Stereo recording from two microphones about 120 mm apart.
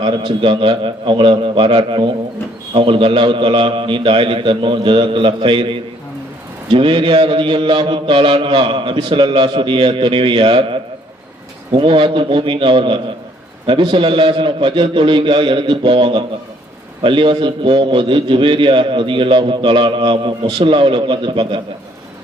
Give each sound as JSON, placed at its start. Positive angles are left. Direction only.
{"t": 0.0, "sound": "a man's voice", "side_deg": -45}